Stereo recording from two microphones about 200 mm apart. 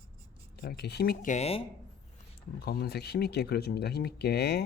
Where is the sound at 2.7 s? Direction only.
55° left (ahead or behind).